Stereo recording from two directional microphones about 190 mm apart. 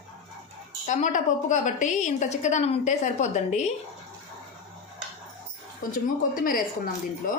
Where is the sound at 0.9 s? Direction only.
40° left (ahead or behind).